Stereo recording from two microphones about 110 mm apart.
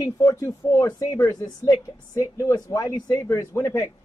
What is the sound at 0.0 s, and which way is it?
Speech, 30° left (ahead or behind).